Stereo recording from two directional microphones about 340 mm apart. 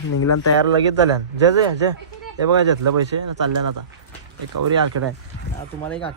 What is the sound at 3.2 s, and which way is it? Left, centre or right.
Speech, right.